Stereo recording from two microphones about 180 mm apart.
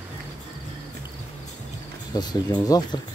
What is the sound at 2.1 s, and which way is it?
Speech, 25° left (ahead or behind).